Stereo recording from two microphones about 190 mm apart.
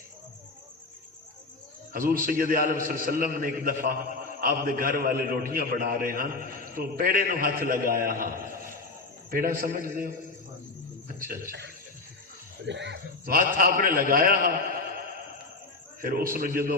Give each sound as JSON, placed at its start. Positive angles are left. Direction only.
{"t": 1.9, "sound": "a man's voice", "side_deg": -50}
{"t": 9.3, "sound": "a man's voice", "side_deg": -50}
{"t": 11.3, "sound": "a man's voice", "side_deg": -55}
{"t": 12.6, "sound": "speech", "side_deg": -70}
{"t": 13.3, "sound": "a man's voice", "side_deg": -50}
{"t": 16.0, "sound": "a man's voice", "side_deg": -45}